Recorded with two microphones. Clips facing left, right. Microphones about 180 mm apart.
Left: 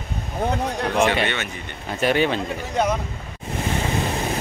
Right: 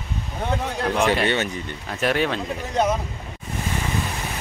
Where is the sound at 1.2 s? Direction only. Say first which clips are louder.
Right 4 dB; 40° right (ahead or behind).